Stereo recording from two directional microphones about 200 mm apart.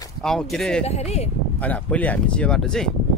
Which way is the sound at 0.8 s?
35° left (ahead or behind).